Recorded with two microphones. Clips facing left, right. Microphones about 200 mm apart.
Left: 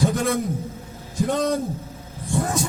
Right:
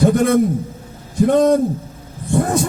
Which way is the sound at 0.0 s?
55° right (ahead or behind).